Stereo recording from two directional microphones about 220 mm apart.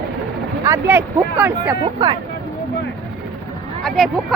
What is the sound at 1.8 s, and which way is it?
Speech, 20° right (ahead or behind).